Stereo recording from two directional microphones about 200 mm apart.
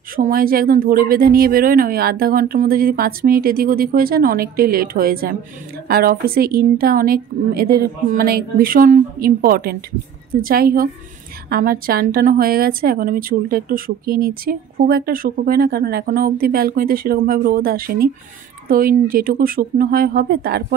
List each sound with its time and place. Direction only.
0.1 s a woman's voice: 45° right (ahead or behind)